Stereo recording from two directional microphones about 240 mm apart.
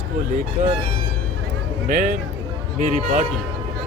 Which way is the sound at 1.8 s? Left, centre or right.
Right.